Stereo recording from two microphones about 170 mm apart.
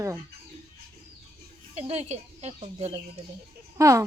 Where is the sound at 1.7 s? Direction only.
40° right (ahead or behind).